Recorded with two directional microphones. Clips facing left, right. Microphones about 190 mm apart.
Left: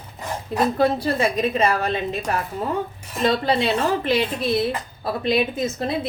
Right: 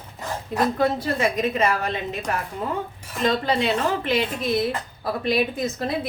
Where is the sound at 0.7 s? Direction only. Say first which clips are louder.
Left 3 dB; 30° left (ahead or behind).